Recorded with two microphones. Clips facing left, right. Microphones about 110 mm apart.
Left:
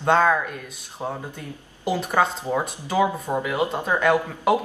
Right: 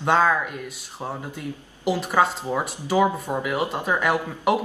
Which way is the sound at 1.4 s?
10° right (ahead or behind).